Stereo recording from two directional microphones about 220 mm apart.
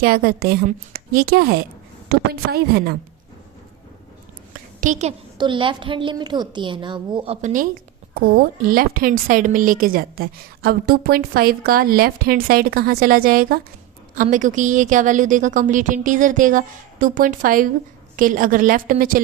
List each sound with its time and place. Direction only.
0.0 s a woman's voice: 45° right (ahead or behind)
4.8 s a woman's voice: 30° right (ahead or behind)
7.4 s a woman's voice: 35° right (ahead or behind)